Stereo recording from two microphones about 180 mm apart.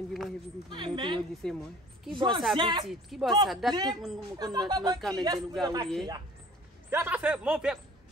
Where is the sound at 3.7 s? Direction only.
20° right (ahead or behind).